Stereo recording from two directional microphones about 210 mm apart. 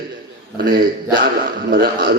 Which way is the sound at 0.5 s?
45° right (ahead or behind).